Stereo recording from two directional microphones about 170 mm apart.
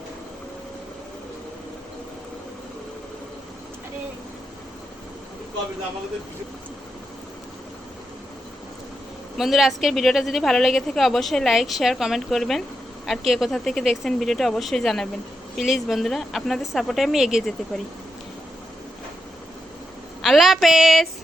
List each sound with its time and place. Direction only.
9.4 s a woman's voice: centre (ahead or behind)
20.2 s a woman's voice: centre (ahead or behind)